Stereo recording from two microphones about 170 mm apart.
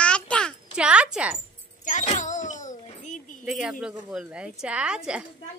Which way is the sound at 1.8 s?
45° left (ahead or behind).